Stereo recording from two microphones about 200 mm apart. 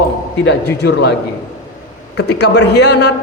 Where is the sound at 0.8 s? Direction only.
55° left (ahead or behind).